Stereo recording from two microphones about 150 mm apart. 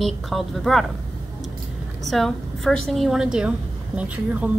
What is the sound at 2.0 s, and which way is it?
A woman's voice, centre (ahead or behind).